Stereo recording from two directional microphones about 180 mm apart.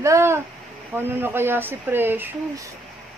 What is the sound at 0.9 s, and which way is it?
Speech, 10° right (ahead or behind).